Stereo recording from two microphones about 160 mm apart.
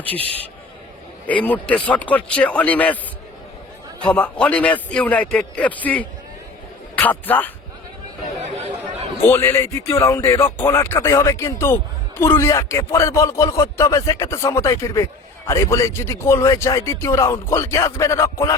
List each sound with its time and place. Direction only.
1.3 s speech: 10° left (ahead or behind)
4.1 s speech: 10° left (ahead or behind)
8.4 s a sound: 45° right (ahead or behind)
9.2 s speech: 15° left (ahead or behind)